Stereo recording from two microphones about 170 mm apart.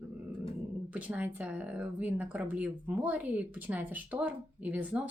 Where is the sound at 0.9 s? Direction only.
10° right (ahead or behind).